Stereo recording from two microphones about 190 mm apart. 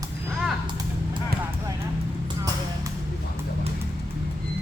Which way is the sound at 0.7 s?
25° right (ahead or behind).